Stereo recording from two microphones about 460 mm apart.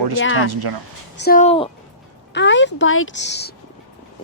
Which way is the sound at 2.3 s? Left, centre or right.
Left.